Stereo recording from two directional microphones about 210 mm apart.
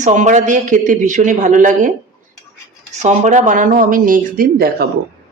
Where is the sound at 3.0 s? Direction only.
35° right (ahead or behind).